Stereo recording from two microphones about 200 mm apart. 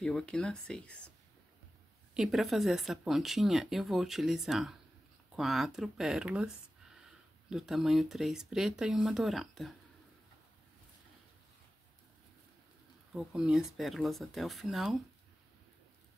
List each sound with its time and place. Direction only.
0.0 s speech: 5° left (ahead or behind)
2.1 s speech: centre (ahead or behind)
13.1 s speech: centre (ahead or behind)